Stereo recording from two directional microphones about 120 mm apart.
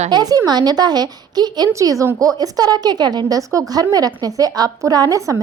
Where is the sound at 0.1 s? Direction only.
30° right (ahead or behind).